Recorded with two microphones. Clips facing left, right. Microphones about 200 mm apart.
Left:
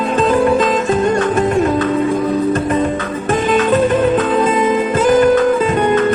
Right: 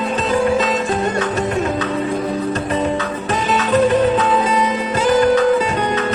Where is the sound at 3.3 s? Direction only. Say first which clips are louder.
Left 5 dB; 50° left (ahead or behind).